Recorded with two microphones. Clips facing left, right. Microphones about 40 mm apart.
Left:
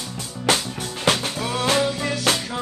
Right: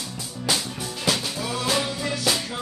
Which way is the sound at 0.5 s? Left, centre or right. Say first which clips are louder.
Left 5 dB; left.